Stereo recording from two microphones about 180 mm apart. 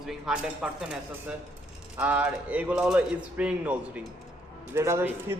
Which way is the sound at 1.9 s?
10° right (ahead or behind).